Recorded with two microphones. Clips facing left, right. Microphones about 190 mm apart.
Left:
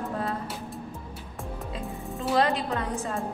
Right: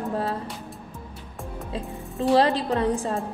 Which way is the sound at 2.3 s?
30° right (ahead or behind).